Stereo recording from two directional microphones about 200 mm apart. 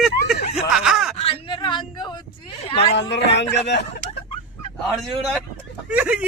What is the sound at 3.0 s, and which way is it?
Speech, 60° left (ahead or behind).